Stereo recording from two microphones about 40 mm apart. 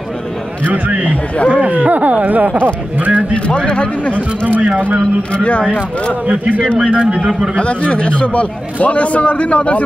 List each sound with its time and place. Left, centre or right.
0.7 s speech: right
3.1 s speech: right
3.4 s a man's voice: left
6.2 s speech: right
7.5 s a man's voice: left